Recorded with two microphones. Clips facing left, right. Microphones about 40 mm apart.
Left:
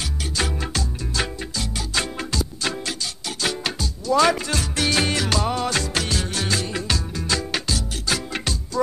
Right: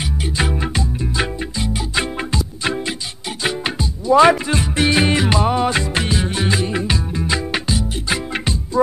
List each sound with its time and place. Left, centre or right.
0.4 s music: right